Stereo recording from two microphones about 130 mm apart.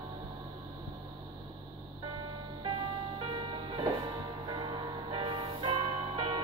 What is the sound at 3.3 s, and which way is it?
Music, 40° right (ahead or behind).